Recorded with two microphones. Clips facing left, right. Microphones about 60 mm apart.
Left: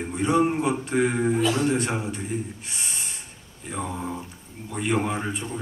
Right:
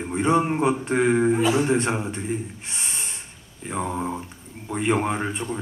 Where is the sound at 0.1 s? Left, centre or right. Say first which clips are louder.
Right 1 dB; right.